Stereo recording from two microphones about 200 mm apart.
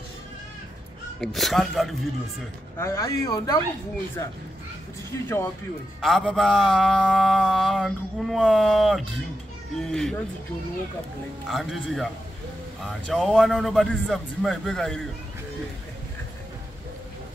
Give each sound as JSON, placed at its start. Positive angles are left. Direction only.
{"t": 1.2, "sound": "a man's voice", "side_deg": 0}
{"t": 2.8, "sound": "speech", "side_deg": 15}
{"t": 5.1, "sound": "speech", "side_deg": 15}
{"t": 5.9, "sound": "a man's voice", "side_deg": 0}
{"t": 11.4, "sound": "a man's voice", "side_deg": 0}
{"t": 13.1, "sound": "a man's voice", "side_deg": 0}